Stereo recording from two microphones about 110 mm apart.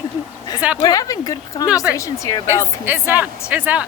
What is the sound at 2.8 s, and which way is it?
A woman's voice, 20° right (ahead or behind).